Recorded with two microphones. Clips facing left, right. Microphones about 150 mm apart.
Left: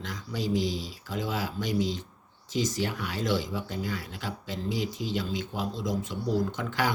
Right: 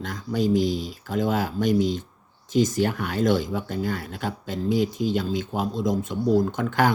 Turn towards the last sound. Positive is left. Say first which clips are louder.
# right 7 dB
turn(degrees=-50)  # may be behind; listen again after turning